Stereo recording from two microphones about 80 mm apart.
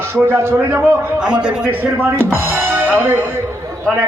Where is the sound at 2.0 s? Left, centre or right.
Right.